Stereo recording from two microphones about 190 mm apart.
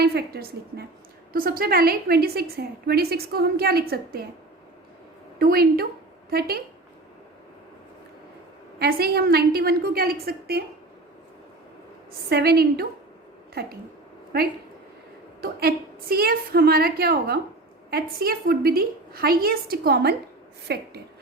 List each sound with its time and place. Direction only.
0.0 s a woman's voice: 55° right (ahead or behind)
5.4 s a woman's voice: 55° right (ahead or behind)
8.8 s a woman's voice: 55° right (ahead or behind)
12.3 s a woman's voice: 55° right (ahead or behind)